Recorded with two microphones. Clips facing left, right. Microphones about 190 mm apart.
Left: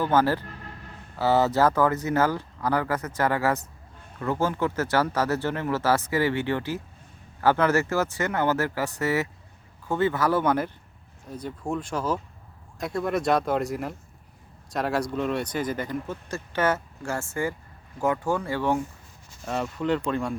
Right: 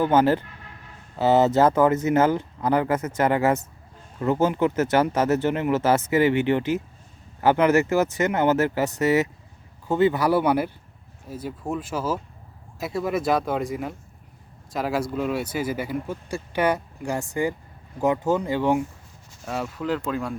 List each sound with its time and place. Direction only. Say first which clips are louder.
0.0 s speech: right 3 dB; 20° right (ahead or behind)
19.5 s speech: left 1 dB; 5° right (ahead or behind)